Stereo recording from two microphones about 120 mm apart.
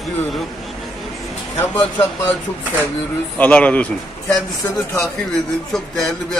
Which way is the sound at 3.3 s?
10° left (ahead or behind).